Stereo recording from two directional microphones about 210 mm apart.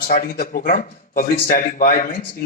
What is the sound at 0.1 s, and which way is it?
Speech, 40° left (ahead or behind).